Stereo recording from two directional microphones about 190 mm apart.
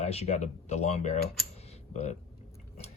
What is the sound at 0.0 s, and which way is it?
Speech, 35° left (ahead or behind).